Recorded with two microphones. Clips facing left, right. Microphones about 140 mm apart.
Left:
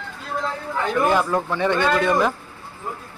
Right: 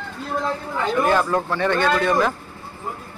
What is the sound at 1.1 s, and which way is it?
Speech, 10° left (ahead or behind).